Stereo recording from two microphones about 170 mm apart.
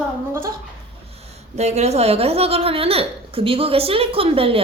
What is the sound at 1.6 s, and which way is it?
A woman's voice, 40° right (ahead or behind).